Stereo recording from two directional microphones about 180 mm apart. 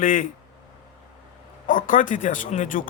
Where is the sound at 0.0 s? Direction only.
50° left (ahead or behind).